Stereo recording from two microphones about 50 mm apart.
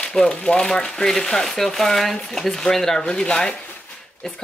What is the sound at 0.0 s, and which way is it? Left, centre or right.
Speech, centre.